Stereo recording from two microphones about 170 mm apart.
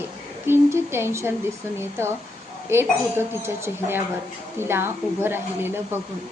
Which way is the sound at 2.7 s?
15° right (ahead or behind).